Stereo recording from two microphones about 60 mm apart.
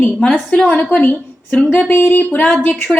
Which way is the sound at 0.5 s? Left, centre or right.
Centre.